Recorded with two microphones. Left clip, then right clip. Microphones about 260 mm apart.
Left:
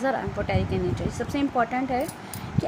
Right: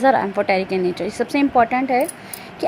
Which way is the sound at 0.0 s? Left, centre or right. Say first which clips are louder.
Right 10 dB; right.